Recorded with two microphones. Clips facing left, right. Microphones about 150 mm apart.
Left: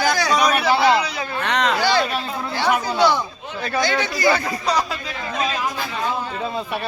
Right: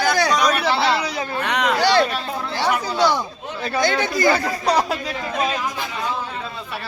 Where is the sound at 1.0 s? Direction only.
40° right (ahead or behind).